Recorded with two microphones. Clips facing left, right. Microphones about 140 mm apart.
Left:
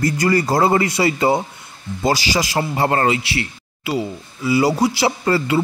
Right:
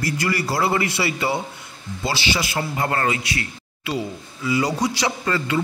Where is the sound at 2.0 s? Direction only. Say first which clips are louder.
Left 5 dB; 40° left (ahead or behind).